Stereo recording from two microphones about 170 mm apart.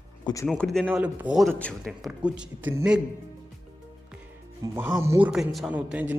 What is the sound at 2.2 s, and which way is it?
Speech, 5° right (ahead or behind).